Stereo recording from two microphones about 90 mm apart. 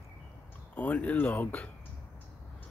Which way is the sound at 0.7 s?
15° left (ahead or behind).